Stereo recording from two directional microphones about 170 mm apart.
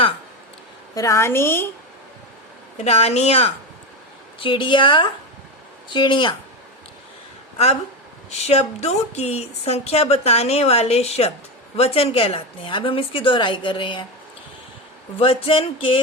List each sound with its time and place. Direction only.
0.9 s a woman's voice: 20° left (ahead or behind)
2.7 s a woman's voice: 40° left (ahead or behind)
8.4 s speech: 40° left (ahead or behind)
15.2 s speech: 35° left (ahead or behind)